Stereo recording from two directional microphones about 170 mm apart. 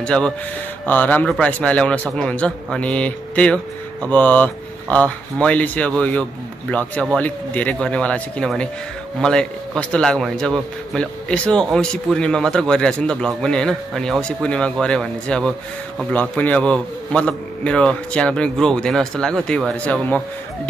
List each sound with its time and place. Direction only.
0.0 s a man's voice: 5° left (ahead or behind)